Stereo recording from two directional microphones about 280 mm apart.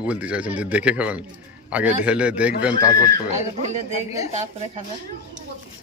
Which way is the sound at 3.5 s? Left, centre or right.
Right.